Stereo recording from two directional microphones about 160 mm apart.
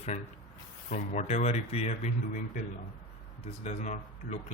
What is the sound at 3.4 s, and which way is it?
Speech, 45° left (ahead or behind).